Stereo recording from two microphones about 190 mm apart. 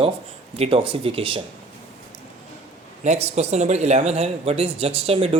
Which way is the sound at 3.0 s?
35° right (ahead or behind).